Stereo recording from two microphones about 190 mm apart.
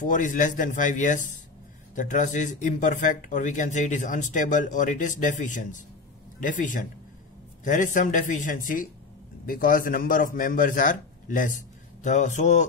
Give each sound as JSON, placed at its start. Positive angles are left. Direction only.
{"t": 0.0, "sound": "a man's voice", "side_deg": 40}